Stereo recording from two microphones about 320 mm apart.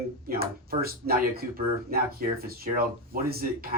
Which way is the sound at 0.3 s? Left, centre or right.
Right.